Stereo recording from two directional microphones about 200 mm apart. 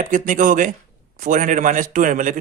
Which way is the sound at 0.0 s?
40° right (ahead or behind).